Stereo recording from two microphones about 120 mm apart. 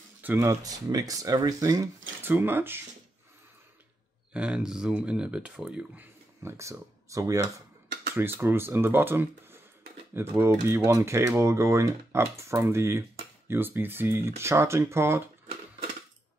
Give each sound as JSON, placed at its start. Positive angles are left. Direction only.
{"t": 0.2, "sound": "speech", "side_deg": -20}
{"t": 2.2, "sound": "speech", "side_deg": -15}
{"t": 4.3, "sound": "speech", "side_deg": -10}
{"t": 6.4, "sound": "speech", "side_deg": -25}